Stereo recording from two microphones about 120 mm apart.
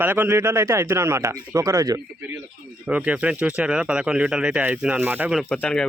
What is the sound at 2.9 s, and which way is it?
Speech, 10° right (ahead or behind).